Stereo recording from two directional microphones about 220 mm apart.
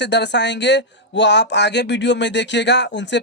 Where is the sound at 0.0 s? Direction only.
50° left (ahead or behind).